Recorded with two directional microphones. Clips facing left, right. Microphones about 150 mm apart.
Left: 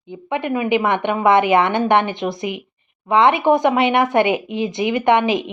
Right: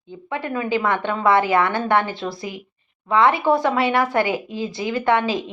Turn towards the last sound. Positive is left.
turn(degrees=20)  # may be behind; listen again after turning